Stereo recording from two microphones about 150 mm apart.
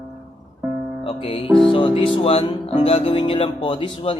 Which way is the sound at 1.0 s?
40° left (ahead or behind).